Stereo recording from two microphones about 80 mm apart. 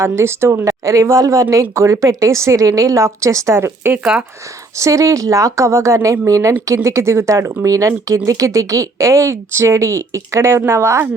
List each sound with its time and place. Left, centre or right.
0.0 s speech: right